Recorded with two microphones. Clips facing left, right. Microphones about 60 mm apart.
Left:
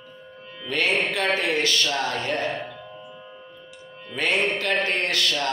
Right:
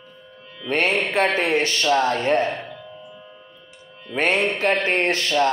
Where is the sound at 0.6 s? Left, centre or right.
Right.